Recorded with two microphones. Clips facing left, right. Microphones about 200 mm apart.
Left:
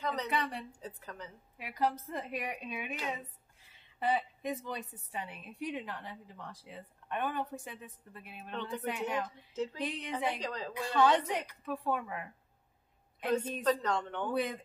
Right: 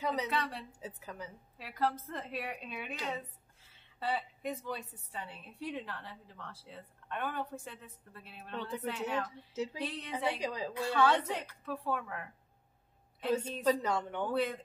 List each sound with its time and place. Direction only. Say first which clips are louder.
0.0 s a woman's voice: right 2 dB; 10° right (ahead or behind)
0.3 s a woman's voice: left 1 dB; 15° left (ahead or behind)
0.7 s speech: even; 5° right (ahead or behind)
1.6 s a woman's voice: left 1 dB; 15° left (ahead or behind)
10.3 s speech: right 2 dB; 10° right (ahead or behind)
10.7 s a woman's voice: left 2 dB; 15° left (ahead or behind)
13.3 s speech: even; 10° right (ahead or behind)